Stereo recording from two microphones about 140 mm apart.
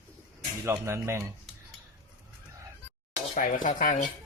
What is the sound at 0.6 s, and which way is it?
Speech, 20° right (ahead or behind).